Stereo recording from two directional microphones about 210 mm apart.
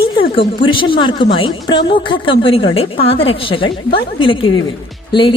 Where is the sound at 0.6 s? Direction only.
25° left (ahead or behind).